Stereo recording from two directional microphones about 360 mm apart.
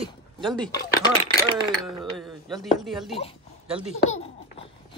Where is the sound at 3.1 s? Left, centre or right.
Centre.